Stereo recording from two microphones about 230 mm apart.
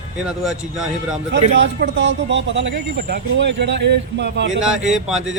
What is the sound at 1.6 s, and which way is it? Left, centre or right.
Speech, right.